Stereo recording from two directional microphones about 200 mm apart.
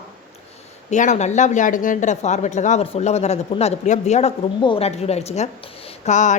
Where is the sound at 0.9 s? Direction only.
35° left (ahead or behind).